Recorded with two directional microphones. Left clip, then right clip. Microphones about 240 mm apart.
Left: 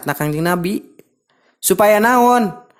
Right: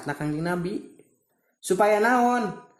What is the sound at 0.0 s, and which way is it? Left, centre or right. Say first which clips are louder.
Speech: left 10 dB; left.